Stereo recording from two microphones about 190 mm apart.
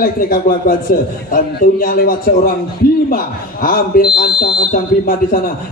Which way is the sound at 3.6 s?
50° left (ahead or behind).